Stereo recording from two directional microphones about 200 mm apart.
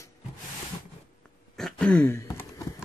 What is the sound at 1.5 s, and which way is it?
Throat clearing, 5° left (ahead or behind).